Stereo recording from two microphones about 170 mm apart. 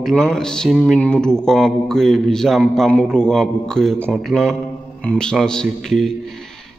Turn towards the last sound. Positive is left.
turn(degrees=0)  # may be behind; listen again after turning